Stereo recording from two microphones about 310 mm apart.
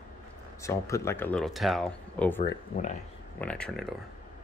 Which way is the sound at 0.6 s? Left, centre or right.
Centre.